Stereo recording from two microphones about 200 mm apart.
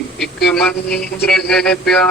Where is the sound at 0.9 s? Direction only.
50° left (ahead or behind).